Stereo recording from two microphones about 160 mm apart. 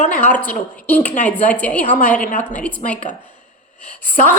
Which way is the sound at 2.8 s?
55° left (ahead or behind).